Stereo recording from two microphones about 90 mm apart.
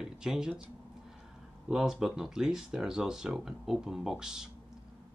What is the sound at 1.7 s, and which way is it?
Speech, 5° right (ahead or behind).